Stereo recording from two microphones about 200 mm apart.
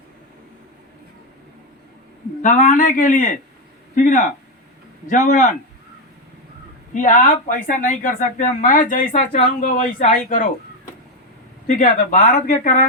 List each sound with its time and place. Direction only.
2.4 s speech: 40° left (ahead or behind)
6.9 s speech: 40° left (ahead or behind)
11.7 s speech: 40° left (ahead or behind)